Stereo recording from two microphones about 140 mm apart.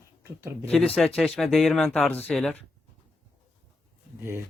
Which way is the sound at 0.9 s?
Centre (ahead or behind).